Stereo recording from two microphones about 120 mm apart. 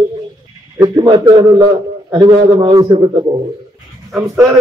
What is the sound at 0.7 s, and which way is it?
A man's voice, 35° right (ahead or behind).